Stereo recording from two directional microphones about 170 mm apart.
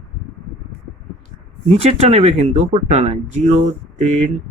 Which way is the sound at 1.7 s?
35° right (ahead or behind).